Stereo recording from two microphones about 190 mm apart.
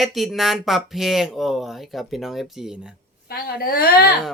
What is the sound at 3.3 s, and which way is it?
Speech, 50° left (ahead or behind).